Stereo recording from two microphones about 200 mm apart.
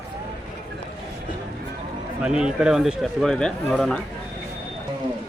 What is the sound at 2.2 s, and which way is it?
A man's voice, 5° right (ahead or behind).